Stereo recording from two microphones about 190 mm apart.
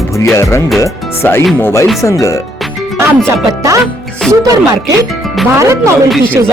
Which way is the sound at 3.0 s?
15° right (ahead or behind).